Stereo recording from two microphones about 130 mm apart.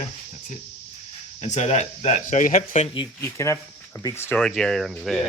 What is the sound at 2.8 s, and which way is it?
Speech, 40° left (ahead or behind).